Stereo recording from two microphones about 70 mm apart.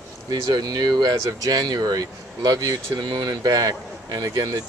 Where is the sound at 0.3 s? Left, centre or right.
Right.